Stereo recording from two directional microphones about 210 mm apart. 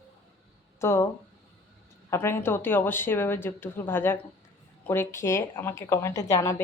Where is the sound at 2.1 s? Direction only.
10° left (ahead or behind).